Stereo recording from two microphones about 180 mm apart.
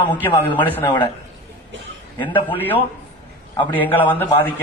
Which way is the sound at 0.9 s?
25° left (ahead or behind).